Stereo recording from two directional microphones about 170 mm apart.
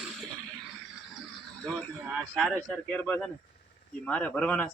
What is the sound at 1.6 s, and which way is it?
A man's voice, 5° left (ahead or behind).